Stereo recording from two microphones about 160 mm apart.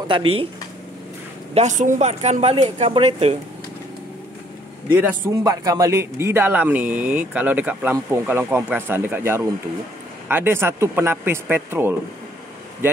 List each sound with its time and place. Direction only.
0.1 s speech: 35° right (ahead or behind)
1.5 s speech: 45° right (ahead or behind)
5.4 s speech: 25° right (ahead or behind)